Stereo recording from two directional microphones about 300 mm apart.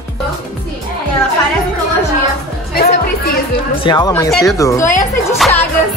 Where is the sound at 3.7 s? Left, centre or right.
Centre.